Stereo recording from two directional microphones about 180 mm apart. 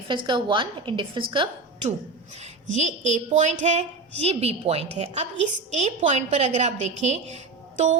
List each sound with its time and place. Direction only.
0.1 s a woman's voice: 25° right (ahead or behind)
2.3 s a woman's voice: 40° right (ahead or behind)